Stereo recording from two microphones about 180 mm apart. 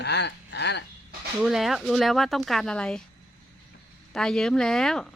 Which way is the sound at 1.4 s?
Centre (ahead or behind).